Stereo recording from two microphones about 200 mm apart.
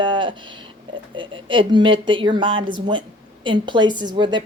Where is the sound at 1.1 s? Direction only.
25° right (ahead or behind).